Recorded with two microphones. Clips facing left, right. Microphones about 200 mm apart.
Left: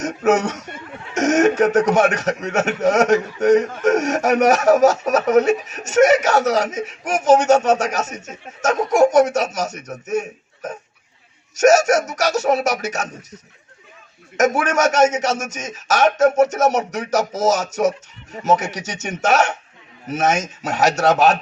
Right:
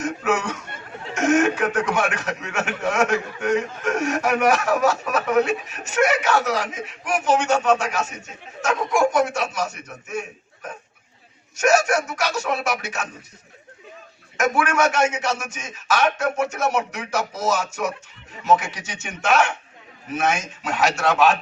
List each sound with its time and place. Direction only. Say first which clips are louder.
0.0 s a man's voice: left 6 dB; 40° left (ahead or behind)
14.3 s a man's voice: left 3 dB; 40° left (ahead or behind)